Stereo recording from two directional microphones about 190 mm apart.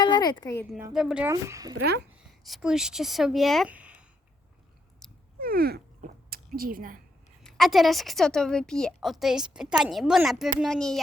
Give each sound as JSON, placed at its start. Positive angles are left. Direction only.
{"t": 0.0, "sound": "speech", "side_deg": 20}
{"t": 0.9, "sound": "a woman's voice", "side_deg": -5}
{"t": 1.3, "sound": "speech", "side_deg": -15}
{"t": 1.7, "sound": "speech", "side_deg": -60}
{"t": 2.4, "sound": "a woman's voice", "side_deg": 0}
{"t": 5.4, "sound": "a sound", "side_deg": -50}
{"t": 7.4, "sound": "a woman's voice", "side_deg": 0}